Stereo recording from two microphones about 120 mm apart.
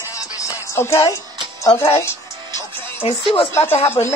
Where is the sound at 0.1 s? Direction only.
30° left (ahead or behind).